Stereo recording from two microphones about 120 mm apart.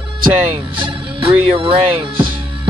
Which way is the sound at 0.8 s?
50° right (ahead or behind).